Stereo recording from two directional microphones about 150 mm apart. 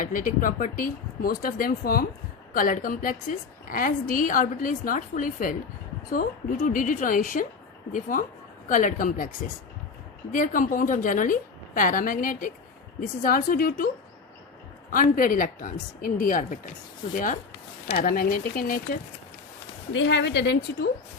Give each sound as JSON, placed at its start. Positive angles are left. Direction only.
{"t": 0.0, "sound": "speech", "side_deg": 65}
{"t": 2.5, "sound": "a woman's voice", "side_deg": 65}
{"t": 10.3, "sound": "a woman's voice", "side_deg": 65}
{"t": 17.8, "sound": "speech", "side_deg": 70}
{"t": 20.5, "sound": "speech", "side_deg": 90}